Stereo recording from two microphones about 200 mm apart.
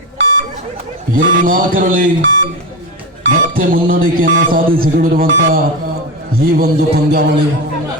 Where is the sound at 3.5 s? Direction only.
45° right (ahead or behind).